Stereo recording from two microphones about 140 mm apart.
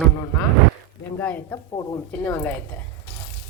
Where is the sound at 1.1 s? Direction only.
15° left (ahead or behind).